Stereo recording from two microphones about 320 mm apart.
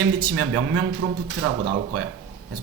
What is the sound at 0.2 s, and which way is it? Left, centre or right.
Speech, right.